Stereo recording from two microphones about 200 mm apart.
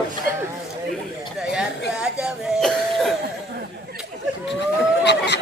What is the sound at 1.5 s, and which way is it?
Cough, 5° right (ahead or behind).